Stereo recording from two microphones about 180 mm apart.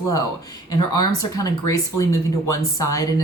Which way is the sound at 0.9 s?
20° left (ahead or behind).